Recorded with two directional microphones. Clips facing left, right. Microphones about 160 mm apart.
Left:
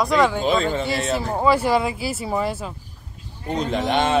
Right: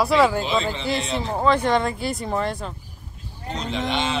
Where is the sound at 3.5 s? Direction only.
50° left (ahead or behind).